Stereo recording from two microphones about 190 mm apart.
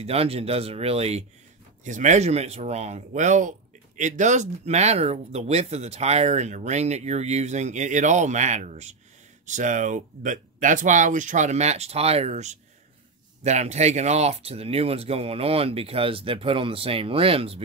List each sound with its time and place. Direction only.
0.0 s speech: 30° right (ahead or behind)